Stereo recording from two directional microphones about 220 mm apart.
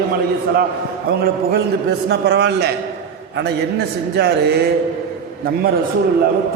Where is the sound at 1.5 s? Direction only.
45° right (ahead or behind).